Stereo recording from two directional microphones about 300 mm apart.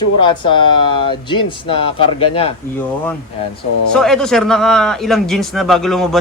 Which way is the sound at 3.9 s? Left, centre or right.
Centre.